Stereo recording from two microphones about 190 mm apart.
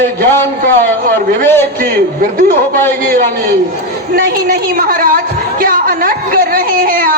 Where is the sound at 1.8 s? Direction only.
45° right (ahead or behind).